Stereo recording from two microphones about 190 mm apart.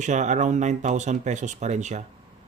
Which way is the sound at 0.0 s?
40° right (ahead or behind).